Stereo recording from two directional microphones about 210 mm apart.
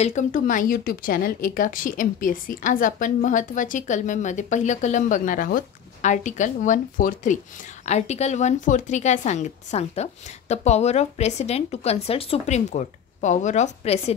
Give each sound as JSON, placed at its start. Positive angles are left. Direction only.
{"t": 0.0, "sound": "speech", "side_deg": 35}